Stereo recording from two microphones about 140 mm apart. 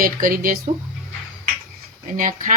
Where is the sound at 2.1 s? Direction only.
70° right (ahead or behind).